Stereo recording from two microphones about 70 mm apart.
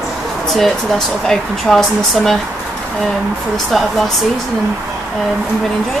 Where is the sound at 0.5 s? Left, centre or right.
Centre.